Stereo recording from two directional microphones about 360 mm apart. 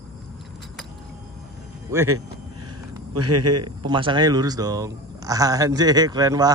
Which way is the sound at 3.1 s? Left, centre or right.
Right.